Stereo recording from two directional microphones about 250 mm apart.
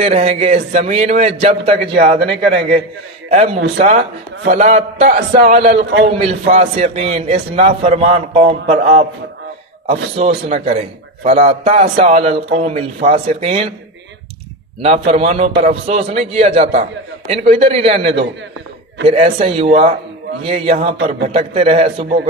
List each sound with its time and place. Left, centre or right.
0.0 s a man's voice: right
14.8 s a man's voice: right